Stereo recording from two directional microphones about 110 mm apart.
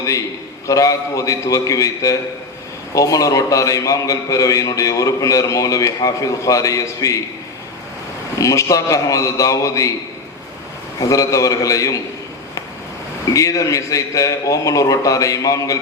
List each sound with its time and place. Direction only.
0.0 s a man's voice: 30° left (ahead or behind)
8.4 s a man's voice: 30° left (ahead or behind)
11.1 s a man's voice: 30° left (ahead or behind)
13.3 s a man's voice: 30° left (ahead or behind)